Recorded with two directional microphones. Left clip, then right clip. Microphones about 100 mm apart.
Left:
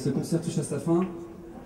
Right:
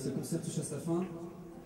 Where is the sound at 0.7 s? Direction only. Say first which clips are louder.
Left 9 dB; 30° right (ahead or behind).